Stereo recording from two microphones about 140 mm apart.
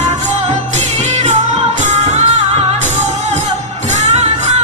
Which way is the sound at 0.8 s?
55° right (ahead or behind).